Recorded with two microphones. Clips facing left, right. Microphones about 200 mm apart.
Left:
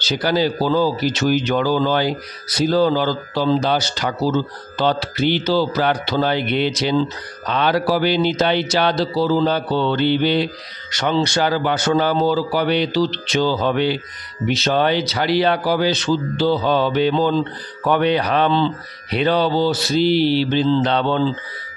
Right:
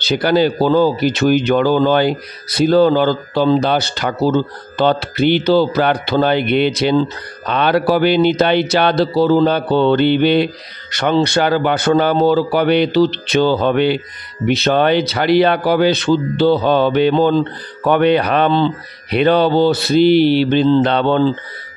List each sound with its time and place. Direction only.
0.0 s a man's voice: 60° right (ahead or behind)